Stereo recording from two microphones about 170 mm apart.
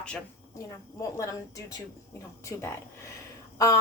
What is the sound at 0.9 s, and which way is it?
A woman's voice, 20° left (ahead or behind).